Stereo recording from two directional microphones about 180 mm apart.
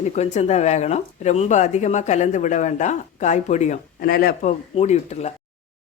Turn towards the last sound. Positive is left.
turn(degrees=40)  # may be behind; listen again after turning